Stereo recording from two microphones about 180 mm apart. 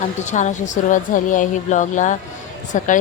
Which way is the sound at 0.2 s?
40° left (ahead or behind).